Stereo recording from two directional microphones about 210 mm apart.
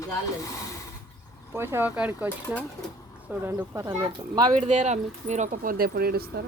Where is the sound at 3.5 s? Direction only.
15° right (ahead or behind).